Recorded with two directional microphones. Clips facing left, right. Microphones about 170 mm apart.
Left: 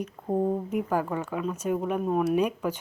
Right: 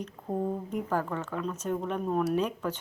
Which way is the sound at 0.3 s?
20° left (ahead or behind).